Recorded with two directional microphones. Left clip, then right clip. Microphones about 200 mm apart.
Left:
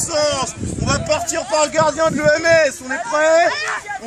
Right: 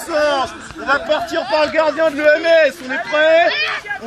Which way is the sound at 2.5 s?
35° right (ahead or behind).